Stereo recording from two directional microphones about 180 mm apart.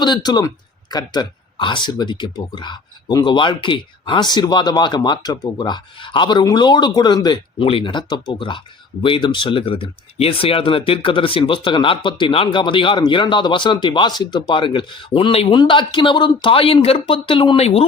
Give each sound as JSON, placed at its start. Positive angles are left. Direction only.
{"t": 0.0, "sound": "speech", "side_deg": 25}